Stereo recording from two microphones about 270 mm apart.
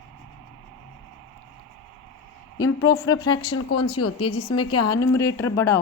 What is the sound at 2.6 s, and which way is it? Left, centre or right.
Speech, left.